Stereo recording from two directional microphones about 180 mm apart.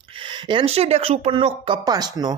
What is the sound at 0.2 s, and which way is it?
Speech, 25° right (ahead or behind).